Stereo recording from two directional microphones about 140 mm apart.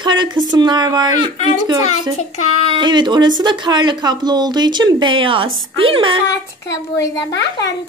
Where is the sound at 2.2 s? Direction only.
50° left (ahead or behind).